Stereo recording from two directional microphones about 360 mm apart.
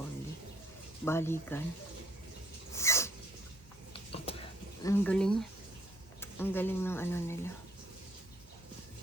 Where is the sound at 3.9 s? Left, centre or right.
Centre.